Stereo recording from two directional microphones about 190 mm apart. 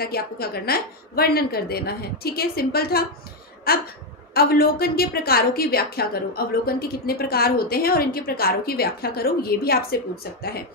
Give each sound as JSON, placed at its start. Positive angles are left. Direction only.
{"t": 0.0, "sound": "a woman's voice", "side_deg": 55}